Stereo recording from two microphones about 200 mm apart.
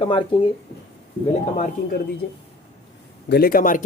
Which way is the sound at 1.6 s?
50° left (ahead or behind).